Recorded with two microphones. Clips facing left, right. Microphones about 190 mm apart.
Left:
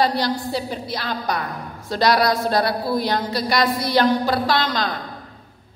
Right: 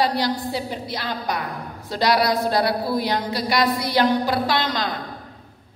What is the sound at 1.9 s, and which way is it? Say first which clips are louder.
A woman's voice: left 2 dB; 15° right (ahead or behind).